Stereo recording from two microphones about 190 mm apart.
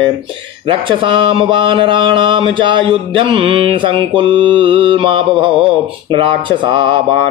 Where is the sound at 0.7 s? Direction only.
25° right (ahead or behind).